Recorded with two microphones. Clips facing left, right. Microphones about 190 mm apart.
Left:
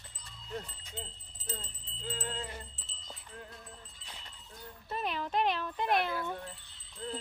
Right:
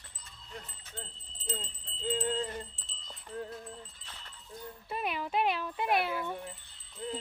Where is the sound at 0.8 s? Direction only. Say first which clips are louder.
Left 1 dB; 15° left (ahead or behind).